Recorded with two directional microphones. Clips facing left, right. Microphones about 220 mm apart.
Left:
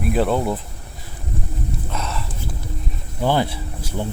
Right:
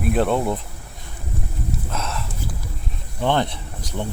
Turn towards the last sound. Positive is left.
turn(degrees=5)  # may be behind; listen again after turning